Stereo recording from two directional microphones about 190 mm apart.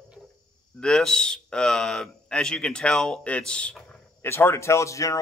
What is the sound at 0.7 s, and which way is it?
A man's voice, 5° left (ahead or behind).